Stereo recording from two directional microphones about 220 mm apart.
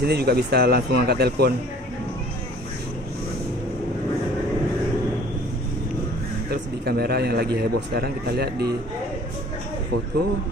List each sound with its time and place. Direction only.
0.0 s a man's voice: 45° right (ahead or behind)
6.5 s a man's voice: 45° right (ahead or behind)